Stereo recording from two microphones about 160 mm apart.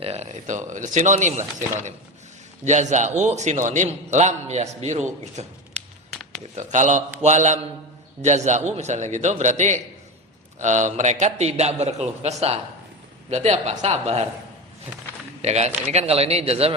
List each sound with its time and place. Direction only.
0.0 s a man's voice: 40° right (ahead or behind)
15.4 s speech: 45° right (ahead or behind)